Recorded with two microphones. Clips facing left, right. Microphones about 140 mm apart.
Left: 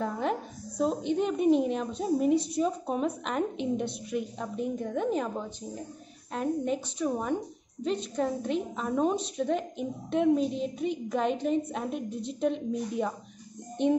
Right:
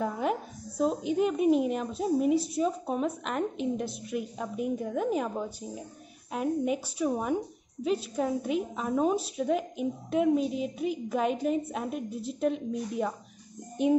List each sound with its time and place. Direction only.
0.0 s a woman's voice: 5° right (ahead or behind)